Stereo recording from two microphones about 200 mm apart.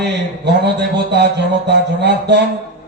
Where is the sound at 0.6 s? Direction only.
60° right (ahead or behind).